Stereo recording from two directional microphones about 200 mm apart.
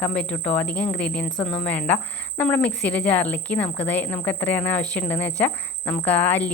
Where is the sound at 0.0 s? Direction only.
5° left (ahead or behind).